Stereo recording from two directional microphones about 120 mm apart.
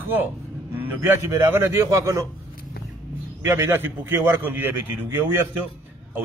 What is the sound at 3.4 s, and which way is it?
A man's voice, 20° right (ahead or behind).